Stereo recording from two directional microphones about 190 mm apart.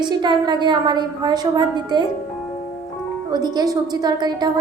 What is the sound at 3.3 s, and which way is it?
A woman's voice, 20° right (ahead or behind).